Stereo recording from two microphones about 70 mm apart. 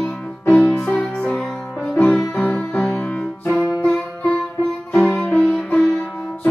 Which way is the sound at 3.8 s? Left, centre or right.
Centre.